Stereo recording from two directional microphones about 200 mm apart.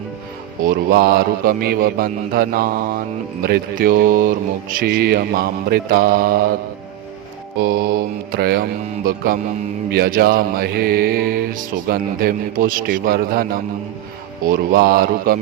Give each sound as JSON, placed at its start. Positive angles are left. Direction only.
{"t": 0.6, "sound": "music", "side_deg": -45}
{"t": 7.6, "sound": "music", "side_deg": -50}